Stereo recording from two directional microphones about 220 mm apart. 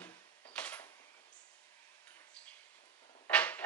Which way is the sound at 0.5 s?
5° left (ahead or behind).